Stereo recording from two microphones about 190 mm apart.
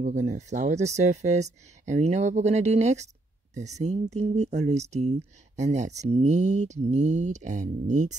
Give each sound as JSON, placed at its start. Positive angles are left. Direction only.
{"t": 0.0, "sound": "speech", "side_deg": -40}